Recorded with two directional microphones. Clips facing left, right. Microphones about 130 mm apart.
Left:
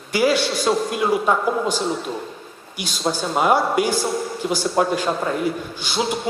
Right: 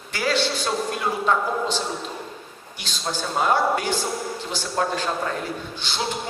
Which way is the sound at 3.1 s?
10° left (ahead or behind).